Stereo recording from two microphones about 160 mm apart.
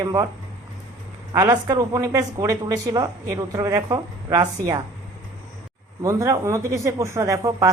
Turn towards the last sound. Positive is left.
turn(degrees=-20)  # may be behind; listen again after turning